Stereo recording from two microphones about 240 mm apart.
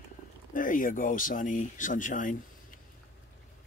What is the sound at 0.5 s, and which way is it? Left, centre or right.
Speech, left.